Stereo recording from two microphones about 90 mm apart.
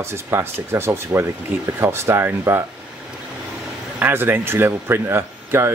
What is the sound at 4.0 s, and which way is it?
Speech, 25° right (ahead or behind).